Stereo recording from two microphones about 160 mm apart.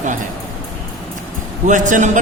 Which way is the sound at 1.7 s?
50° right (ahead or behind).